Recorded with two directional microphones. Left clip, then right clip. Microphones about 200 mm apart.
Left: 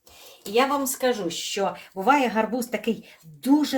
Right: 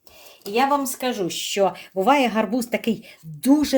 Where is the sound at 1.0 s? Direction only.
60° right (ahead or behind).